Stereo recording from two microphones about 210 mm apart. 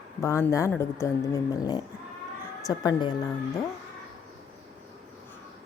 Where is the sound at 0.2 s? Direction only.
15° left (ahead or behind).